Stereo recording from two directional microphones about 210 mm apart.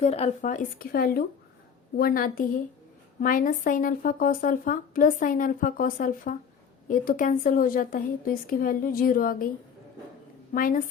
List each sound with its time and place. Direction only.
0.0 s speech: 30° left (ahead or behind)
10.5 s speech: 40° left (ahead or behind)